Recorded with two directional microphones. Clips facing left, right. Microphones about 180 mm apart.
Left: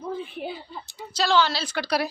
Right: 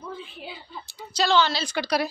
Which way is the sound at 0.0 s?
50° left (ahead or behind).